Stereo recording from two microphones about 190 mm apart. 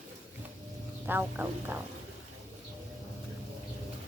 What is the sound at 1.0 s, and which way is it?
Speech, 10° right (ahead or behind).